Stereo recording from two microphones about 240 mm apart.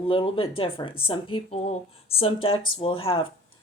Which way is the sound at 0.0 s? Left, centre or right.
Left.